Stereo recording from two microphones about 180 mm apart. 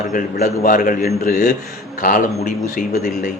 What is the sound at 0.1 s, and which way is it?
Speech, 50° left (ahead or behind).